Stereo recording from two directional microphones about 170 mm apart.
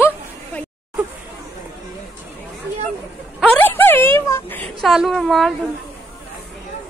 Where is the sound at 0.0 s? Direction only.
10° left (ahead or behind).